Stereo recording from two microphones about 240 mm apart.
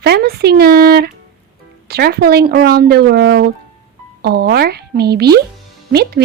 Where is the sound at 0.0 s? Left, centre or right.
Right.